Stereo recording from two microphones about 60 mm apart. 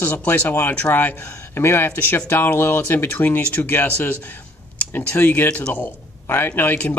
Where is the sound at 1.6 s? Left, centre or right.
Left.